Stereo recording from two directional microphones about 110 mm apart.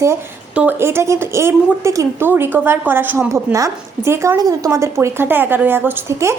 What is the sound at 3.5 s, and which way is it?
A woman's voice, 30° right (ahead or behind).